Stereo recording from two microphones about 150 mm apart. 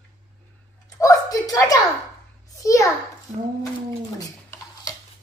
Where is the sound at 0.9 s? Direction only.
20° left (ahead or behind).